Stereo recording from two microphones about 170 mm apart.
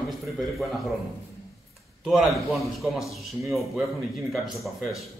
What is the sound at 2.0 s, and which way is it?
A man's voice, centre (ahead or behind).